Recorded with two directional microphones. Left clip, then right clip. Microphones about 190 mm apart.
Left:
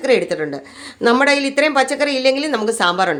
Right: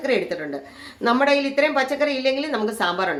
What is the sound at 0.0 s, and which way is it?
A woman's voice, 45° left (ahead or behind).